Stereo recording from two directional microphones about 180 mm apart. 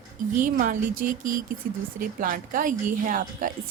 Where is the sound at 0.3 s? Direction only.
45° right (ahead or behind).